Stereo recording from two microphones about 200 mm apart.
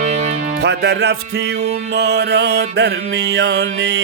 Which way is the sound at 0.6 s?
55° right (ahead or behind).